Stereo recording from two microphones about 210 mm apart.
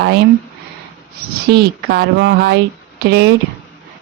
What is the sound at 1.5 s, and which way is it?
Speech, 50° right (ahead or behind).